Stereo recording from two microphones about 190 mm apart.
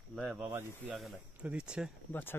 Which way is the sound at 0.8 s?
Centre (ahead or behind).